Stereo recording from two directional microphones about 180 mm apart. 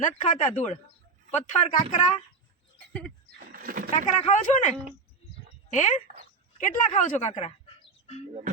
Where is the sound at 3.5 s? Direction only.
55° right (ahead or behind).